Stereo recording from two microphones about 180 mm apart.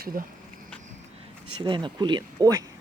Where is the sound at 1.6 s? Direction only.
25° right (ahead or behind).